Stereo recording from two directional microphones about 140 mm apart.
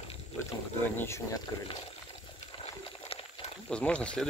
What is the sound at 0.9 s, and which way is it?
Speech, 20° left (ahead or behind).